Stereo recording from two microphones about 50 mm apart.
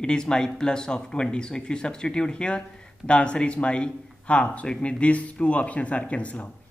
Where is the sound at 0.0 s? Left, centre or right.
Centre.